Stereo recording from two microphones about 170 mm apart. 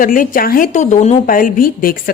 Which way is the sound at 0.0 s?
55° left (ahead or behind).